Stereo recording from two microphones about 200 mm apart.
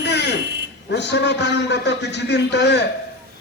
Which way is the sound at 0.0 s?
60° left (ahead or behind).